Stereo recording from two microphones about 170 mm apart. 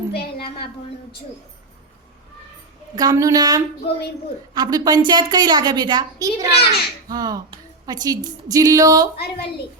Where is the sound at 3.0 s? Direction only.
20° right (ahead or behind).